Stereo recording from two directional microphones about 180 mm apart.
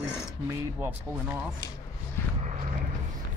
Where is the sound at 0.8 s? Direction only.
15° right (ahead or behind).